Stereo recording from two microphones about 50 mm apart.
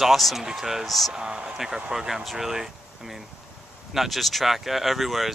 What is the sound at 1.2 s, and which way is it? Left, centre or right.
Speech, centre.